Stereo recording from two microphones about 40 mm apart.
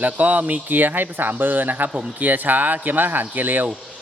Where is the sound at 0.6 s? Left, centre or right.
Right.